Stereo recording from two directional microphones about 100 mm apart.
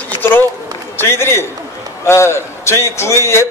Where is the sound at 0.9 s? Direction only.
25° left (ahead or behind).